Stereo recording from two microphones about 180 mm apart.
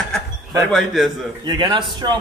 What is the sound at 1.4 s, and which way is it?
Speech, 25° right (ahead or behind).